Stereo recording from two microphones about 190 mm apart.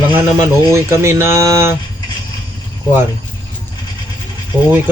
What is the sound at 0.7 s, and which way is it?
Speech, 15° right (ahead or behind).